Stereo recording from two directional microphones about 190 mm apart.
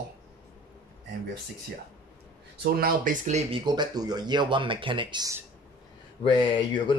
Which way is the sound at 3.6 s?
25° right (ahead or behind).